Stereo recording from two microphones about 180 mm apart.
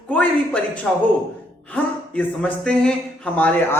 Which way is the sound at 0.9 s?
5° left (ahead or behind).